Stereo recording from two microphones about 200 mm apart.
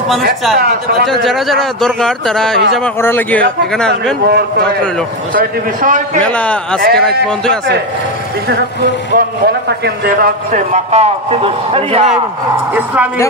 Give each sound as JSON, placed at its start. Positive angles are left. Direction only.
{"t": 0.6, "sound": "speech", "side_deg": -50}
{"t": 1.2, "sound": "a man's voice", "side_deg": 0}
{"t": 4.3, "sound": "speech", "side_deg": -55}
{"t": 5.3, "sound": "a man's voice", "side_deg": -40}
{"t": 6.2, "sound": "a man's voice", "side_deg": 5}
{"t": 6.8, "sound": "speech", "side_deg": -50}
{"t": 8.5, "sound": "speech", "side_deg": -55}
{"t": 10.5, "sound": "a man's voice", "side_deg": -35}
{"t": 12.7, "sound": "a woman's voice", "side_deg": -10}